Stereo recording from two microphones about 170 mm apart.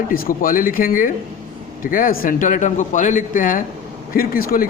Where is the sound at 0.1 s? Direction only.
55° left (ahead or behind).